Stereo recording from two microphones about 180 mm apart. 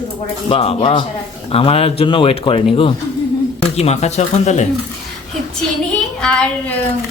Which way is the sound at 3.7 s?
35° left (ahead or behind).